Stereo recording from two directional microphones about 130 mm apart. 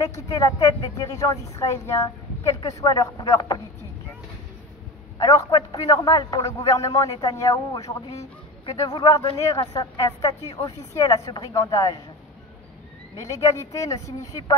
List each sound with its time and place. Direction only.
0.0 s a woman's voice: 30° left (ahead or behind)
5.7 s a woman's voice: 30° left (ahead or behind)
7.1 s speech: 40° left (ahead or behind)
7.4 s a woman's voice: 25° left (ahead or behind)
13.1 s a woman's voice: 25° left (ahead or behind)